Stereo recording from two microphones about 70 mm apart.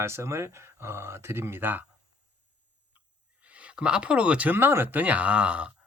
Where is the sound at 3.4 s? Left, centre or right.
Centre.